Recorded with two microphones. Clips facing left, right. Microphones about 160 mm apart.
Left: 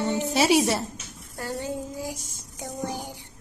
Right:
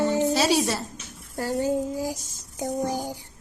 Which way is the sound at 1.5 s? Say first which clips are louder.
Right 7 dB; 30° right (ahead or behind).